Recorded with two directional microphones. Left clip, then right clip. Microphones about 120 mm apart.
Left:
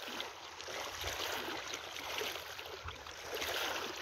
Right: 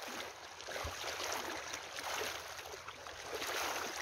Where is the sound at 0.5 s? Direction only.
25° left (ahead or behind).